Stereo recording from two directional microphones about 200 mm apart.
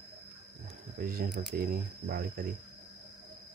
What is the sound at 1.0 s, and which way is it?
Speech, 45° right (ahead or behind).